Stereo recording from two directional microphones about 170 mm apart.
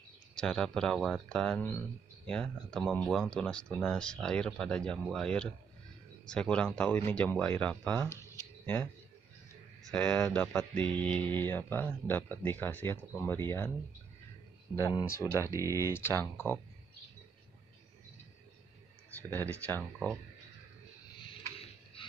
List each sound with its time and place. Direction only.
0.4 s speech: 5° left (ahead or behind)
9.9 s speech: 5° left (ahead or behind)
14.8 s speech: 20° left (ahead or behind)
15.4 s speech: 20° right (ahead or behind)
15.8 s speech: 15° left (ahead or behind)
19.3 s speech: 10° left (ahead or behind)